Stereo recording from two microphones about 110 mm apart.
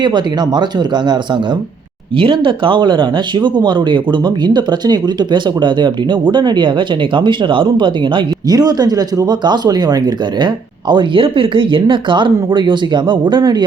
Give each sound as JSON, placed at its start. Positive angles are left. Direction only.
{"t": 0.0, "sound": "speech", "side_deg": -40}
{"t": 2.1, "sound": "speech", "side_deg": -50}
{"t": 8.5, "sound": "speech", "side_deg": -35}